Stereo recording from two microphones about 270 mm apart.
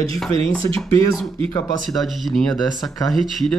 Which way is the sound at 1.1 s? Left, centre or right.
Centre.